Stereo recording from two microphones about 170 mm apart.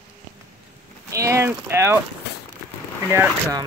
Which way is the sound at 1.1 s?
20° right (ahead or behind).